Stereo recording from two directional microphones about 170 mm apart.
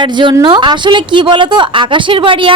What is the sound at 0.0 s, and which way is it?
A woman's voice, 25° right (ahead or behind).